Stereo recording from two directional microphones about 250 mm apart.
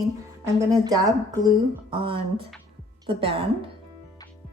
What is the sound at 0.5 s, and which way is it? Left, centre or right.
A woman's voice, centre.